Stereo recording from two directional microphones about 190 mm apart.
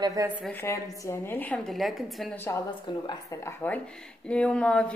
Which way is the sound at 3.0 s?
15° left (ahead or behind).